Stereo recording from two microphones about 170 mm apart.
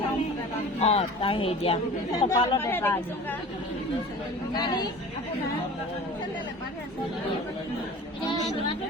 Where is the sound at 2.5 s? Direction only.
15° left (ahead or behind).